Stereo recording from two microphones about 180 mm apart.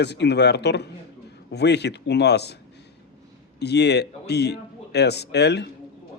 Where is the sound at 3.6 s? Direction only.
70° left (ahead or behind).